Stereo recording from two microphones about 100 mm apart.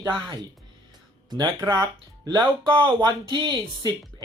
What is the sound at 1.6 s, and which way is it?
Speech, 35° right (ahead or behind).